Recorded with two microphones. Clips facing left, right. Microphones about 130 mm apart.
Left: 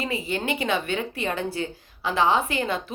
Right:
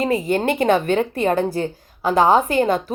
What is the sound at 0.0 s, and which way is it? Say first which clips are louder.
A woman's voice: right 9 dB; 45° right (ahead or behind).